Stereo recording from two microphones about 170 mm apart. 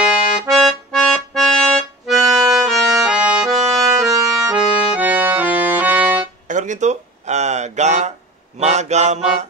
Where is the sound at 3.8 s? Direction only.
20° right (ahead or behind).